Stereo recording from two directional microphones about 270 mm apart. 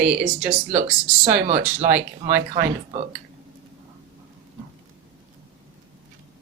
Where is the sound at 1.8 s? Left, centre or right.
Centre.